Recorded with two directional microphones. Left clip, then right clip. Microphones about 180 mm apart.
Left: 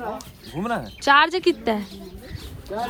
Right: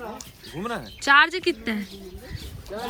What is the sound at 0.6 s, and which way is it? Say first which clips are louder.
Speech: left 4 dB; 15° left (ahead or behind).